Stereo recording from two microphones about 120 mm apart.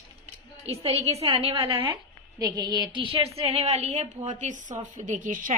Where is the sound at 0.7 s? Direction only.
55° right (ahead or behind).